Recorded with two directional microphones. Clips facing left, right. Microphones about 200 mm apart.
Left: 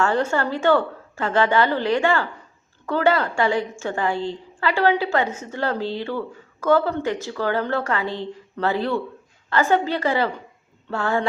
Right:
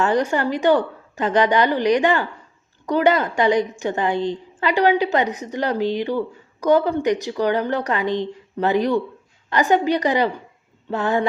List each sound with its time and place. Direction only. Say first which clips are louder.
0.0 s a woman's voice: right 2 dB; 15° right (ahead or behind)